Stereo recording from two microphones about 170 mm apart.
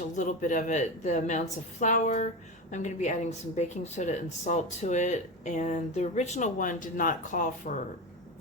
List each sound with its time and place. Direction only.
0.2 s a woman's voice: 50° left (ahead or behind)